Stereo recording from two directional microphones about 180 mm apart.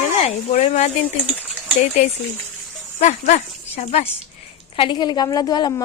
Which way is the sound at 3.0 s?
40° left (ahead or behind).